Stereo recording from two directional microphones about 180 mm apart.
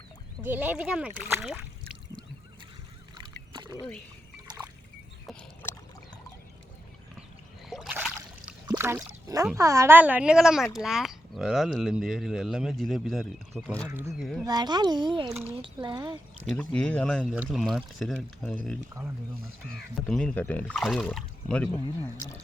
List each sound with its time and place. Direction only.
0.4 s speech: 10° right (ahead or behind)
3.5 s a sound: 25° right (ahead or behind)
7.7 s a sound: 5° right (ahead or behind)
8.6 s a woman's voice: 15° right (ahead or behind); by 13.8 s centre (ahead or behind)
13.8 s a woman's voice: 15° right (ahead or behind)
14.1 s speech: centre (ahead or behind)
14.4 s speech: 20° right (ahead or behind)
16.5 s speech: 5° left (ahead or behind)